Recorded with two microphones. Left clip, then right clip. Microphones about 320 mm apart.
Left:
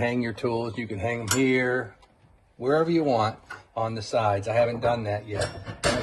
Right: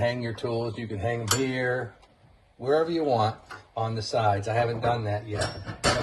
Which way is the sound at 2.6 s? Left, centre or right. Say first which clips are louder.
Left 1 dB; left.